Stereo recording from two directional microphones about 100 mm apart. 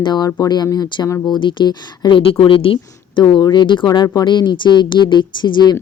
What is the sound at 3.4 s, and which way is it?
Speech, 50° left (ahead or behind).